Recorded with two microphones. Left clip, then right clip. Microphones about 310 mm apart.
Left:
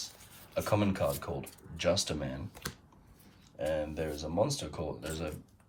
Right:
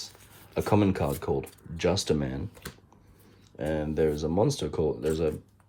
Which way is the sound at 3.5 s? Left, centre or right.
Right.